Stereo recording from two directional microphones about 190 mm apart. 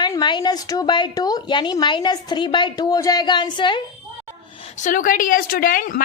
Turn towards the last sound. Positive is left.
turn(degrees=45)  # may be behind; listen again after turning